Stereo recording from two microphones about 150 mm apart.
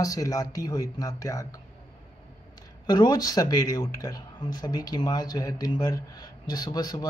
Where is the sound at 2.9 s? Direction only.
25° left (ahead or behind).